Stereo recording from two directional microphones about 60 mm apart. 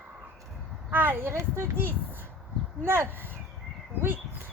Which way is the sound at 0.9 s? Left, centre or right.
Right.